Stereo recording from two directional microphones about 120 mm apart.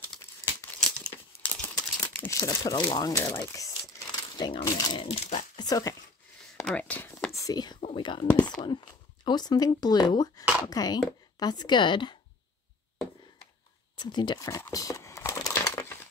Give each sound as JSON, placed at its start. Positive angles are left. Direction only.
{"t": 0.6, "sound": "crumpling", "side_deg": 25}
{"t": 2.1, "sound": "speech", "side_deg": 25}
{"t": 3.2, "sound": "crumpling", "side_deg": 25}
{"t": 4.6, "sound": "speech", "side_deg": 35}
{"t": 5.0, "sound": "speech", "side_deg": 60}
{"t": 5.6, "sound": "speech", "side_deg": 30}
{"t": 6.6, "sound": "speech", "side_deg": 10}
{"t": 7.3, "sound": "speech", "side_deg": 30}
{"t": 13.9, "sound": "speech", "side_deg": 40}
{"t": 14.7, "sound": "crumpling", "side_deg": 30}